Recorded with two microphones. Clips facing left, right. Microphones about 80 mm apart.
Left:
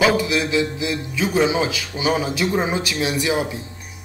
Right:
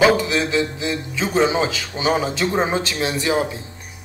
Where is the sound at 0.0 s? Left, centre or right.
Right.